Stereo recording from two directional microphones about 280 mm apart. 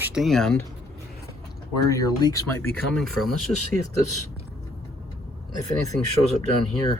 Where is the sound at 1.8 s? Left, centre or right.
Centre.